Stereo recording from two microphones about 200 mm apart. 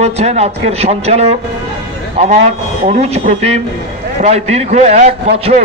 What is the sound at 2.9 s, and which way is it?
A man's voice, 30° right (ahead or behind).